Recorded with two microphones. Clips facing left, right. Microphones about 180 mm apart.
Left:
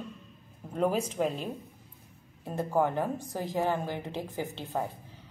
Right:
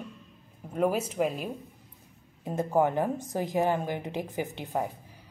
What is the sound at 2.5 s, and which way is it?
Speech, 20° right (ahead or behind).